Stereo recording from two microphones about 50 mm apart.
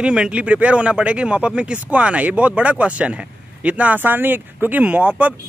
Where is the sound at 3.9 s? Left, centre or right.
Right.